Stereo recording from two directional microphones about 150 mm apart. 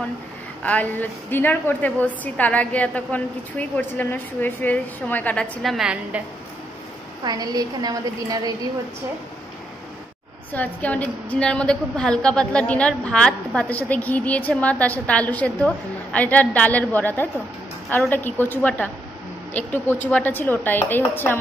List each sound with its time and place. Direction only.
0.7 s a woman's voice: 10° left (ahead or behind); by 6.2 s 5° right (ahead or behind)
7.2 s a woman's voice: 25° right (ahead or behind)
10.5 s a woman's voice: 10° left (ahead or behind)